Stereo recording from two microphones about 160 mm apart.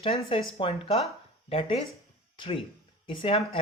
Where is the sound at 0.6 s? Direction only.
40° left (ahead or behind).